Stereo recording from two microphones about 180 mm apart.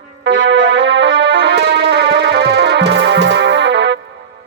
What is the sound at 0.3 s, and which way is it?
Music, 90° right.